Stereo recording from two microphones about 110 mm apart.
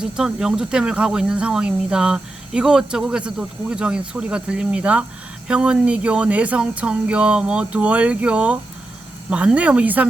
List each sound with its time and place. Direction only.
0.0 s speech: 5° right (ahead or behind)